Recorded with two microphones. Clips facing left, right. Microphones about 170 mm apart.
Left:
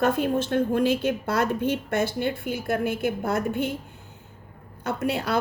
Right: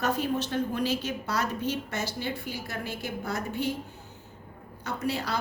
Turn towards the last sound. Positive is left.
turn(degrees=60)  # may be behind; listen again after turning